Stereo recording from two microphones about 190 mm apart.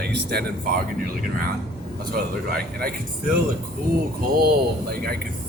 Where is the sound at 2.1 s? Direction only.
55° right (ahead or behind).